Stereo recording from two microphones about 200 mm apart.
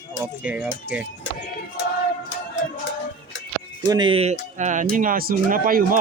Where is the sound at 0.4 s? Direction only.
5° right (ahead or behind).